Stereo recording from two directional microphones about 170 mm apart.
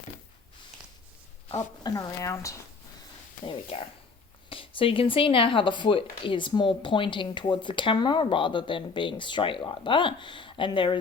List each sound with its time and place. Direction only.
1.5 s speech: 20° left (ahead or behind)
3.4 s speech: 35° left (ahead or behind)